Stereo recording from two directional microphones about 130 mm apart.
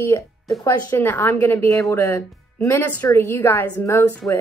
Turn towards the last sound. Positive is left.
turn(degrees=25)  # may be behind; listen again after turning